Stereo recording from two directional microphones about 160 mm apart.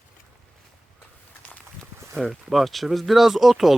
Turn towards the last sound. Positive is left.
turn(degrees=0)  # may be behind; listen again after turning